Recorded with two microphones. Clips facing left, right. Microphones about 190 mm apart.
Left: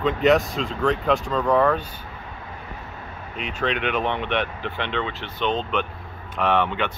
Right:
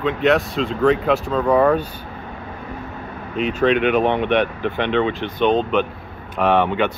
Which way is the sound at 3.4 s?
40° right (ahead or behind).